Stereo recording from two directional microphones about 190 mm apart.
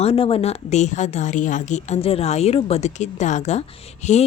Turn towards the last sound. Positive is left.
turn(degrees=35)  # may be behind; listen again after turning